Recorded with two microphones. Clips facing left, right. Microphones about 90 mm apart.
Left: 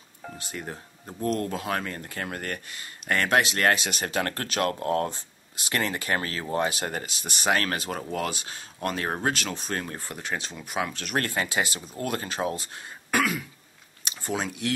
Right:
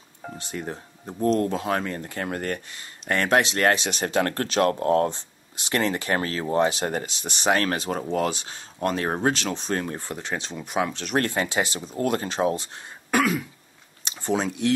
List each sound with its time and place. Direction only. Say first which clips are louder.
0.5 s speech: right 5 dB; 20° right (ahead or behind)
13.1 s throat clearing: right 3 dB; 30° right (ahead or behind)
14.0 s speech: right 5 dB; 25° right (ahead or behind)